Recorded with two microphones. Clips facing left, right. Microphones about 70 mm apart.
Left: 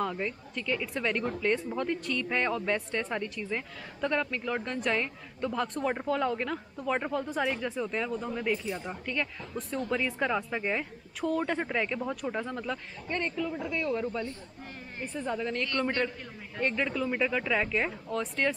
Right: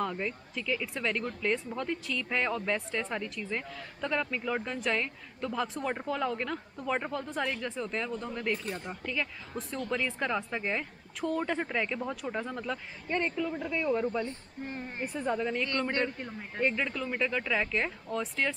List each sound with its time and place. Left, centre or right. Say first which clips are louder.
0.0 s speech: left 1 dB; centre
14.2 s speech: right 1 dB; right
15.1 s speech: right 1 dB; centre